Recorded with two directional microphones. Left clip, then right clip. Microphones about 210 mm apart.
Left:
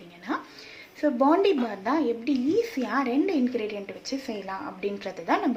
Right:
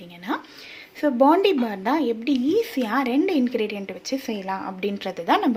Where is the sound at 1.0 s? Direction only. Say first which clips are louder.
Right 4 dB; 45° right (ahead or behind).